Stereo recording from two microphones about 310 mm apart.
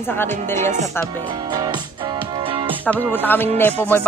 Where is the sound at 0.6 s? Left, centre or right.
Right.